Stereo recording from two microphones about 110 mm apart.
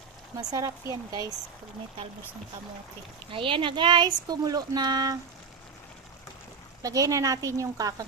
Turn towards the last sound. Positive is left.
turn(degrees=-30)  # may be behind; listen again after turning